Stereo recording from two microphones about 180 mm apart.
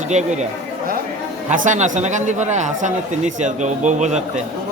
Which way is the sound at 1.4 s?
45° right (ahead or behind).